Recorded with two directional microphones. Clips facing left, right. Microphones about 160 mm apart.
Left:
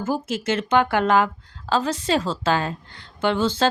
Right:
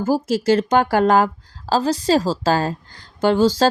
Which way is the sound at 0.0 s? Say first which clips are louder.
Right 6 dB; 35° right (ahead or behind).